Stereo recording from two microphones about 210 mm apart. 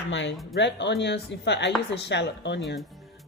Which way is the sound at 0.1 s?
60° left (ahead or behind).